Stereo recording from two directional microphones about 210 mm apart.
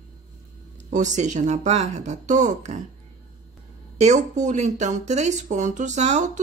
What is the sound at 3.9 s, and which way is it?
Speech, 35° right (ahead or behind).